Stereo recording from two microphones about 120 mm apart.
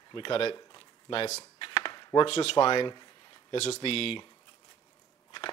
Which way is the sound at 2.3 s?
60° left (ahead or behind).